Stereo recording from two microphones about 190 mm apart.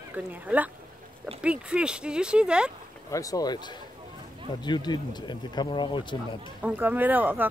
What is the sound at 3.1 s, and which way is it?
Speech, 15° left (ahead or behind).